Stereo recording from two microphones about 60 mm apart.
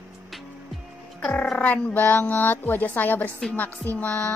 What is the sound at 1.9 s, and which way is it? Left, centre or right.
A woman's voice, left.